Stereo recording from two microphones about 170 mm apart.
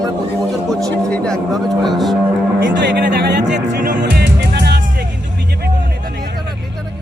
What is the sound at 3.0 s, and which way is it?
Speech, 90° right.